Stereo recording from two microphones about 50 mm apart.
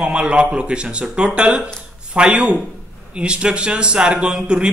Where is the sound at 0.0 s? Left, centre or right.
Right.